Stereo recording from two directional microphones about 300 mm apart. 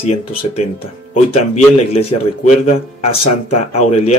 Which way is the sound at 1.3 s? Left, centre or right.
Left.